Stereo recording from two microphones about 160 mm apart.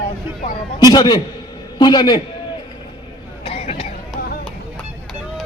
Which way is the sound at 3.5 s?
40° left (ahead or behind).